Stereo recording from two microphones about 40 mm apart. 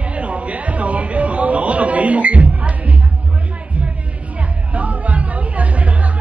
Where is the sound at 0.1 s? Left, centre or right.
Right.